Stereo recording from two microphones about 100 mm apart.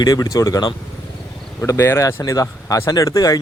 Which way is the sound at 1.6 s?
25° left (ahead or behind).